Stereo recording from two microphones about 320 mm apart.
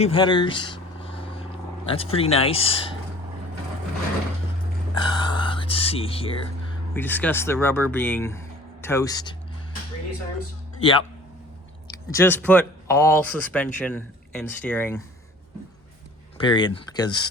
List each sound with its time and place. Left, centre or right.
0.0 s vehicle: centre
1.9 s speech: centre
4.9 s music: centre
6.9 s speech: centre
12.1 s speech: centre
16.4 s speech: centre